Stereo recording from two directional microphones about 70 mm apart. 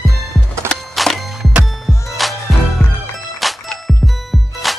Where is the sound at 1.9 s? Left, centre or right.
Left.